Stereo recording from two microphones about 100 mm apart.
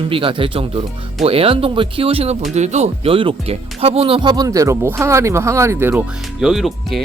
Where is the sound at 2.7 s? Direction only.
85° right; by 4.4 s 50° right (ahead or behind).